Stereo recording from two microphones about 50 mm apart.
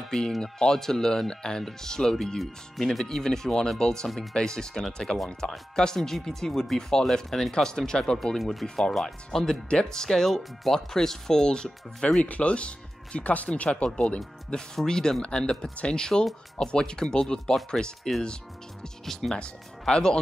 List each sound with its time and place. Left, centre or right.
0.1 s speech: centre
4.1 s speech: centre
4.4 s speech: centre
8.4 s speech: centre
8.6 s speech: centre